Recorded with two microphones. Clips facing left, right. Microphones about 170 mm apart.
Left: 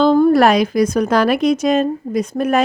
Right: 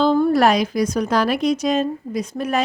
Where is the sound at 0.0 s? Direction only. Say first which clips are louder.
Left 4 dB; 60° left (ahead or behind).